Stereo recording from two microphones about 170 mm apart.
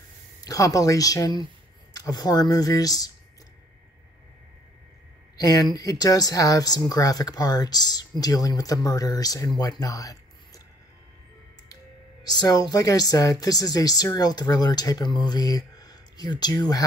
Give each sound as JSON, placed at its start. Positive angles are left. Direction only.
{"t": 0.4, "sound": "speech", "side_deg": 20}
{"t": 5.4, "sound": "speech", "side_deg": 20}
{"t": 11.7, "sound": "speech", "side_deg": 25}